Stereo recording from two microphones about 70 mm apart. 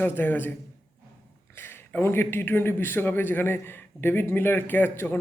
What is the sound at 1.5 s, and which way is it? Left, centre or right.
A man's voice, left.